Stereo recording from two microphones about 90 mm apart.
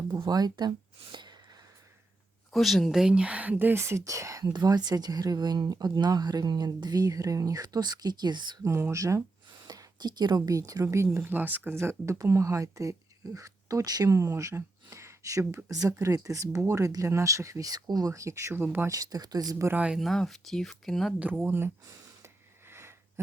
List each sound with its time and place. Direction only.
0.3 s speech: 50° right (ahead or behind)
2.5 s speech: centre (ahead or behind); by 4.5 s 35° right (ahead or behind)
4.5 s speech: 50° right (ahead or behind)
8.6 s speech: 35° right (ahead or behind)
9.5 s speech: 45° right (ahead or behind)
10.8 s speech: 30° right (ahead or behind)
18.9 s speech: 45° right (ahead or behind)
19.7 s speech: 10° right (ahead or behind)
20.0 s speech: centre (ahead or behind)
21.4 s speech: 25° right (ahead or behind)
22.7 s sniff: 30° right (ahead or behind)